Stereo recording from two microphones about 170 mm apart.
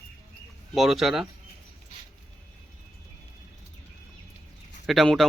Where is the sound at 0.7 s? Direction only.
Centre (ahead or behind).